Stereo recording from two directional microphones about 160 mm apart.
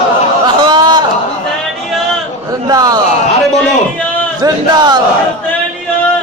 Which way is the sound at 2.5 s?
25° right (ahead or behind).